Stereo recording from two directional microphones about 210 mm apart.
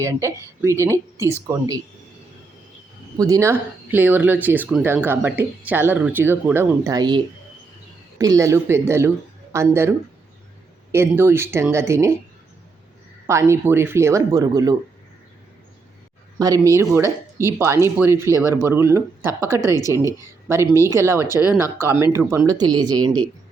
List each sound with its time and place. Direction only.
0.0 s speech: 15° right (ahead or behind)
3.2 s speech: 15° right (ahead or behind)
8.2 s speech: 15° right (ahead or behind)
10.9 s speech: 10° right (ahead or behind)
13.2 s speech: 15° right (ahead or behind)
16.4 s speech: 15° right (ahead or behind)